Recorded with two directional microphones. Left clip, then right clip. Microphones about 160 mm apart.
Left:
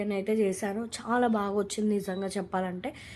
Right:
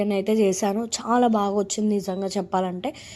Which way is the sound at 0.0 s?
40° right (ahead or behind).